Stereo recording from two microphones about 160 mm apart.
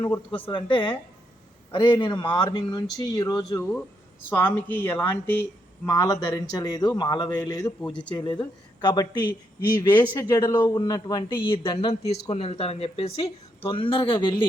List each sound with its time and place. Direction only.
0.0 s a woman's voice: 25° left (ahead or behind)
4.3 s a woman's voice: 10° left (ahead or behind); by 14.4 s 30° left (ahead or behind)